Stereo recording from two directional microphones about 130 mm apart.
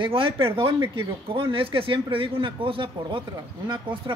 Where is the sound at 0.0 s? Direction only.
45° right (ahead or behind).